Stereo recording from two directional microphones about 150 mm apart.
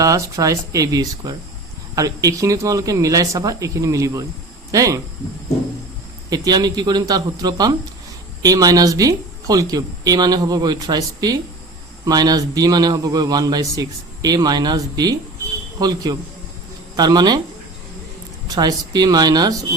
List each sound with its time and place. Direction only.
0.0 s a man's voice: 20° right (ahead or behind)
6.3 s a man's voice: 25° right (ahead or behind)
18.4 s a man's voice: 25° right (ahead or behind)